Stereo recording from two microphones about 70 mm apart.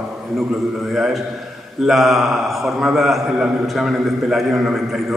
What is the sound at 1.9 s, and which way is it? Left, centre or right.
A man's voice, centre.